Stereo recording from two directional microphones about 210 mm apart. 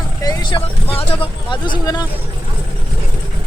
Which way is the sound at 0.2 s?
20° left (ahead or behind).